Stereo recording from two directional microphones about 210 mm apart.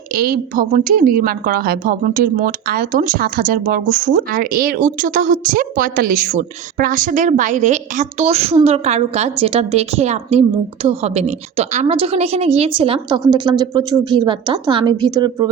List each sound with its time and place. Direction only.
0.1 s a woman's voice: 45° right (ahead or behind); by 15.4 s 20° right (ahead or behind)